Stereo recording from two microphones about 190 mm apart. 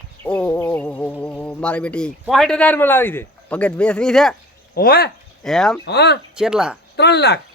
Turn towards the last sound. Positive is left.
turn(degrees=60)  # may be behind; listen again after turning